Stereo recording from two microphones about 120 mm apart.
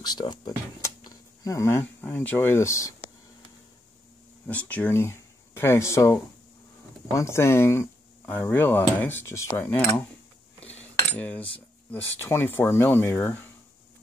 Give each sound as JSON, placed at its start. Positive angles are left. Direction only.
{"t": 0.0, "sound": "speech", "side_deg": 35}
{"t": 4.5, "sound": "speech", "side_deg": 10}
{"t": 11.1, "sound": "cutlery", "side_deg": 15}
{"t": 11.9, "sound": "speech", "side_deg": 20}